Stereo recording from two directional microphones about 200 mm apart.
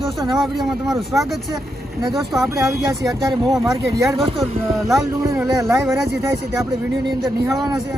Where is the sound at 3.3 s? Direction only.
20° right (ahead or behind).